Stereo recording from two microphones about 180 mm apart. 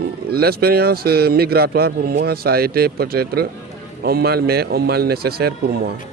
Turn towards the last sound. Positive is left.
turn(degrees=-60)  # may be behind; listen again after turning